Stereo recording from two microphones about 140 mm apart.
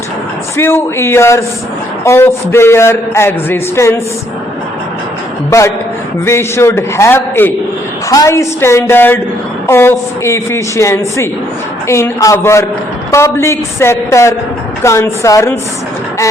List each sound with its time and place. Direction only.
0.5 s a man's voice: 15° left (ahead or behind)
5.5 s a man's voice: 20° left (ahead or behind)